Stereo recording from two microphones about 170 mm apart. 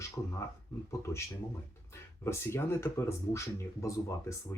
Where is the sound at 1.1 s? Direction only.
15° left (ahead or behind).